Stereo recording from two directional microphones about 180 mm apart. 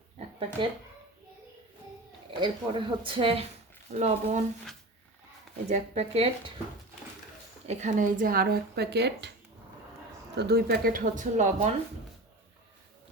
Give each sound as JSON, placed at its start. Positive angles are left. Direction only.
{"t": 0.6, "sound": "speech", "side_deg": -25}
{"t": 2.4, "sound": "speech", "side_deg": -25}
{"t": 5.6, "sound": "speech", "side_deg": -40}
{"t": 7.7, "sound": "speech", "side_deg": -40}
{"t": 10.3, "sound": "speech", "side_deg": -60}